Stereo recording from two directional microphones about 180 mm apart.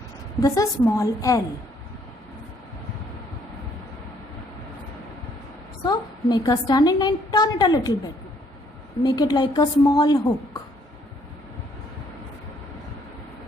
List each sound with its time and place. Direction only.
0.4 s a woman's voice: 20° left (ahead or behind)
5.8 s a woman's voice: 25° left (ahead or behind)